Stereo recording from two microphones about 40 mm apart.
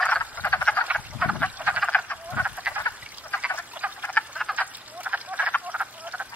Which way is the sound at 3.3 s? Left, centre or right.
Left.